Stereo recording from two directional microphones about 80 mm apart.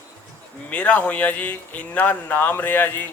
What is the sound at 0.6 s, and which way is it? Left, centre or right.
Speech, centre.